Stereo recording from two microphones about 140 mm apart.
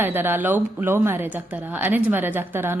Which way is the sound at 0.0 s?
15° right (ahead or behind).